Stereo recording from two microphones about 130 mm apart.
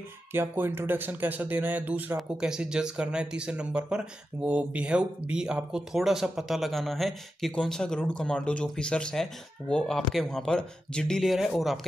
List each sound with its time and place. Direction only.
0.3 s speech: 15° right (ahead or behind); by 11.8 s centre (ahead or behind)